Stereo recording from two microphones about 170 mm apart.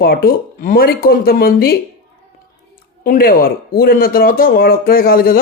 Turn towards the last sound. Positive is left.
turn(degrees=60)  # may be behind; listen again after turning